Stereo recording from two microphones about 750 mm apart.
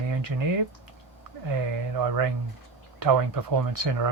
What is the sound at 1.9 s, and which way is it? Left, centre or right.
Speech, right.